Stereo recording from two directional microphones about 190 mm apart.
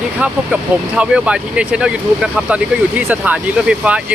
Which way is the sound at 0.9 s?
5° right (ahead or behind).